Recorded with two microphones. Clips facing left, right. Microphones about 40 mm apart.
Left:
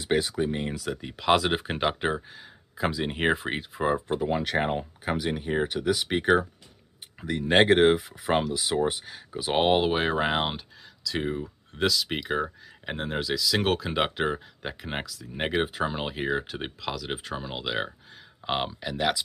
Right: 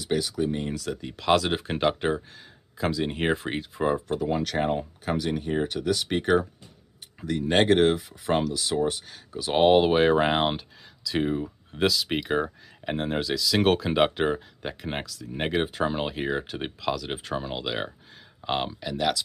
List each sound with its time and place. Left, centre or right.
0.0 s speech: left
0.4 s speech: left
0.7 s speech: centre